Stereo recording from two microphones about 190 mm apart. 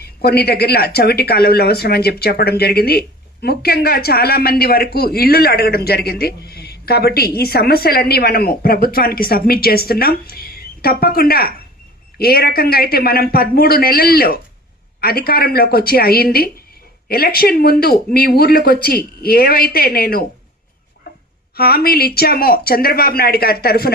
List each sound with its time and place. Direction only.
0.0 s speech: 55° left (ahead or behind)
21.5 s speech: 55° left (ahead or behind)